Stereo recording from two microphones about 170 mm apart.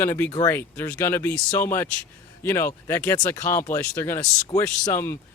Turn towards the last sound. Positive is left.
turn(degrees=15)  # may be behind; listen again after turning